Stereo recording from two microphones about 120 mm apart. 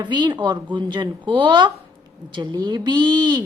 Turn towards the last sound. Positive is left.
turn(degrees=-35)  # may be behind; listen again after turning